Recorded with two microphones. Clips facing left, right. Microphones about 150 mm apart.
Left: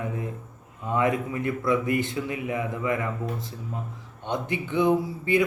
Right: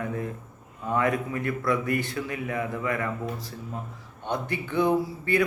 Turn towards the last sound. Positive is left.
turn(degrees=20)  # may be behind; listen again after turning